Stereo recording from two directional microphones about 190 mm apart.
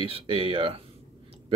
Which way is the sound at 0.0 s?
30° right (ahead or behind).